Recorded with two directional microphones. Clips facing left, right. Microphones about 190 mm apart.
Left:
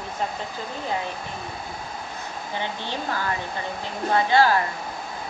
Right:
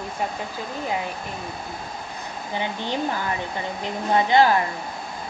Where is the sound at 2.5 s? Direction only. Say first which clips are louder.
Right 4 dB; 15° right (ahead or behind).